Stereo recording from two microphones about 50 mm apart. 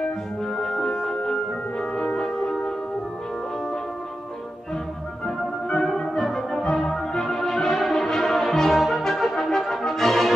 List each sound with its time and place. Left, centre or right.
0.6 s music: centre
5.2 s organ: centre
5.9 s music: centre